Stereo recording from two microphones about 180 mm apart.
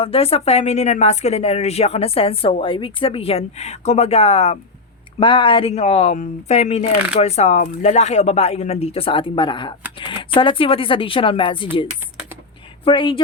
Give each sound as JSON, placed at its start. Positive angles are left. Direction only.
{"t": 0.0, "sound": "speech", "side_deg": 35}
{"t": 12.8, "sound": "speech", "side_deg": 30}